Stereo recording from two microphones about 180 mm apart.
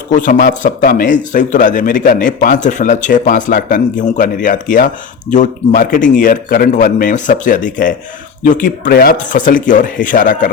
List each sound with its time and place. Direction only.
0.1 s a man's voice: 45° left (ahead or behind)